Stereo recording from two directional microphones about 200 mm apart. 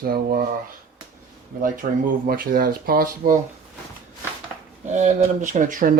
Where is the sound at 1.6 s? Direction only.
40° right (ahead or behind).